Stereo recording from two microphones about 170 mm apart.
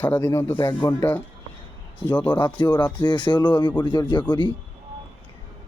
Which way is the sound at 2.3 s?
30° left (ahead or behind).